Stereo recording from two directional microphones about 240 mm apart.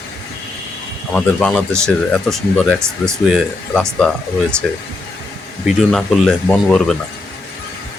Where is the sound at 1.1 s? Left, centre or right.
Centre.